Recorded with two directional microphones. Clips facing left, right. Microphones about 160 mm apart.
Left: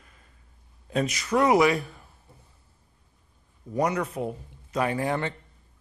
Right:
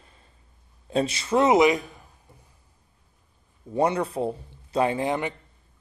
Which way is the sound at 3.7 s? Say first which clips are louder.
Right 3 dB; 30° right (ahead or behind).